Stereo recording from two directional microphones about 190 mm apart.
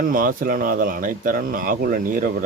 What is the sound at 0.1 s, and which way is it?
Speech, 45° right (ahead or behind).